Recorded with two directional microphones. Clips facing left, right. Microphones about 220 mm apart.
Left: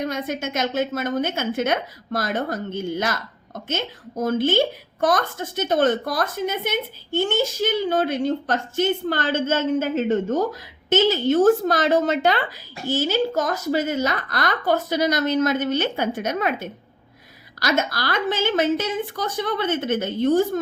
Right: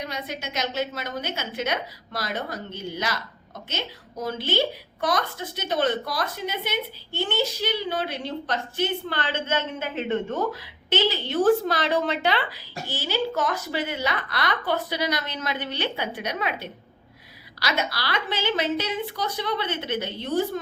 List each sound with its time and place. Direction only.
0.0 s a woman's voice: 50° left (ahead or behind)